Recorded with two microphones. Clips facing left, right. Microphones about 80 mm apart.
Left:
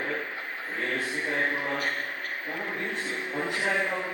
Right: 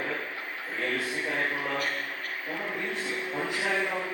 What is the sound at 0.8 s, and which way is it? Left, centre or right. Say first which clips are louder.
A man's voice: even; left.